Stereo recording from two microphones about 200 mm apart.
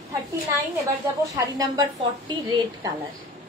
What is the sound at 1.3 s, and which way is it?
A woman's voice, 15° right (ahead or behind).